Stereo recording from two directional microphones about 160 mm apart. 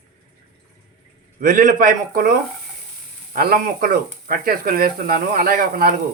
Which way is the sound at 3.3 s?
65° right (ahead or behind).